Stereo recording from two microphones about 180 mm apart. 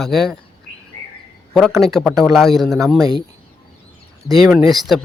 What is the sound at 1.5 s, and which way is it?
A man's voice, centre (ahead or behind).